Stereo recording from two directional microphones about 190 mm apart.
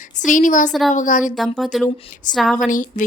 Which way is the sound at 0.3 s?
45° left (ahead or behind).